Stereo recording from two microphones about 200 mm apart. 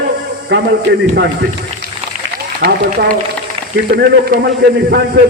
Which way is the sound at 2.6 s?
45° right (ahead or behind).